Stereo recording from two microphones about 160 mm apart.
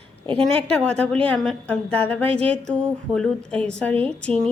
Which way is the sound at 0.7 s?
5° left (ahead or behind).